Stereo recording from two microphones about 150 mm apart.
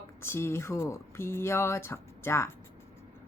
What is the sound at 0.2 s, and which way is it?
Speech, 15° left (ahead or behind).